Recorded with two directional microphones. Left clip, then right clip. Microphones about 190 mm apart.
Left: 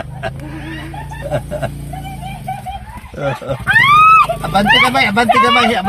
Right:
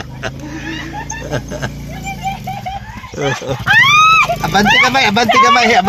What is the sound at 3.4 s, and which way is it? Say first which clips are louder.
Speech: right 1 dB; 25° right (ahead or behind).